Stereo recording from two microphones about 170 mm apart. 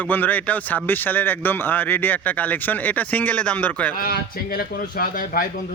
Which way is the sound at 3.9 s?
60° left (ahead or behind).